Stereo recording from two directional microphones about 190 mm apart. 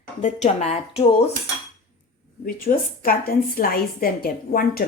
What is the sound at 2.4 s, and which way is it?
A woman's voice, 50° left (ahead or behind).